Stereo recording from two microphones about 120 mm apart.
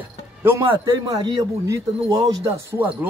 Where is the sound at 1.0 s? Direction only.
35° right (ahead or behind).